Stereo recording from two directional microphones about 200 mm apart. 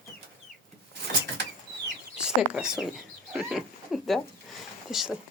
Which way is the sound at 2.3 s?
5° right (ahead or behind).